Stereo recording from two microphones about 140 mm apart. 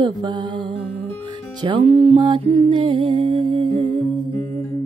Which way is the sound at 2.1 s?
35° right (ahead or behind).